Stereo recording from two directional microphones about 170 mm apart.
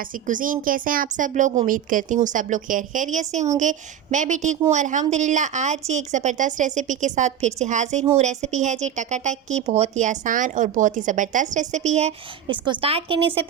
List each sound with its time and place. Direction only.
0.3 s a woman's voice: 50° right (ahead or behind)
12.5 s a woman's voice: 30° right (ahead or behind)